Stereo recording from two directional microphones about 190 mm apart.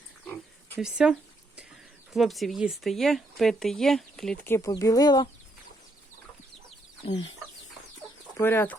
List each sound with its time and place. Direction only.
0.8 s speech: 5° right (ahead or behind)
2.1 s speech: centre (ahead or behind); by 5.3 s 20° left (ahead or behind)
7.0 s speech: 30° left (ahead or behind)
8.4 s speech: 10° left (ahead or behind)